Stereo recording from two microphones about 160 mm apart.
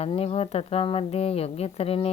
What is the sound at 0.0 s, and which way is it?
Speech, 35° left (ahead or behind).